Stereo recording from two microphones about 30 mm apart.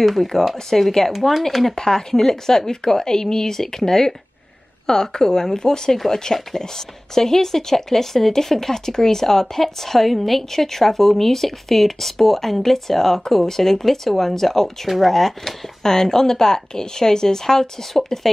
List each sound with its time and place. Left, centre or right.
0.0 s speech: centre
1.8 s speech: centre
15.8 s speech: centre